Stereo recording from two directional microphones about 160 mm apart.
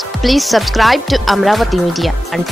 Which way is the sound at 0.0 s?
Centre (ahead or behind).